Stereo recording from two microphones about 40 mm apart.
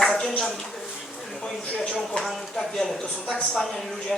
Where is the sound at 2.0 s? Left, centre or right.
Centre.